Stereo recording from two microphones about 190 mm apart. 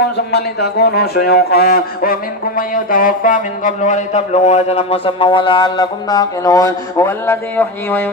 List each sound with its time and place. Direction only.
0.3 s speech: 55° left (ahead or behind); by 8.1 s 10° left (ahead or behind)